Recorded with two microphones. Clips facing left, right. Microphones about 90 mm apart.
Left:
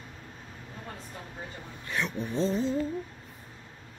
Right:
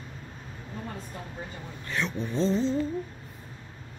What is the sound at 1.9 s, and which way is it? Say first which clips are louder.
Speech: right 1 dB; 15° left (ahead or behind).